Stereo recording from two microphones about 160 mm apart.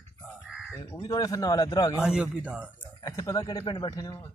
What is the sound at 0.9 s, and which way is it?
Speech, 25° left (ahead or behind).